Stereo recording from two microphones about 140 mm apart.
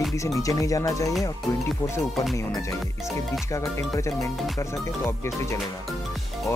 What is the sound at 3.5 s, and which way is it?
Speech, 20° left (ahead or behind).